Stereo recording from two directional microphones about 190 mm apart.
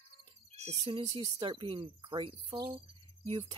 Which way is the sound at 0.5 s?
30° right (ahead or behind).